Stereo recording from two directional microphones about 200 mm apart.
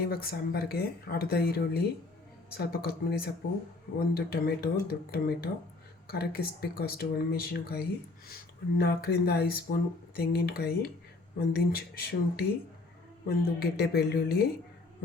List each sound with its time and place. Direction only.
0.0 s speech: 50° left (ahead or behind)